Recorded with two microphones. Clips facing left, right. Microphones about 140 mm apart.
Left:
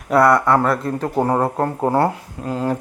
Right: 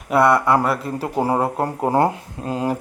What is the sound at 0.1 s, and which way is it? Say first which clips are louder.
Speech: left 1 dB; centre (ahead or behind).